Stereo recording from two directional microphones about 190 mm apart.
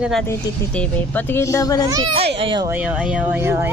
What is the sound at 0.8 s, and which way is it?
Speech, 10° left (ahead or behind).